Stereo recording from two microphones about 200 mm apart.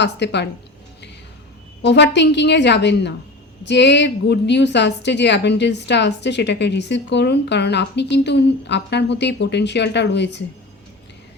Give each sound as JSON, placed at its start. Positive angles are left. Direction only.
{"t": 0.0, "sound": "a woman's voice", "side_deg": 60}
{"t": 1.8, "sound": "a woman's voice", "side_deg": 60}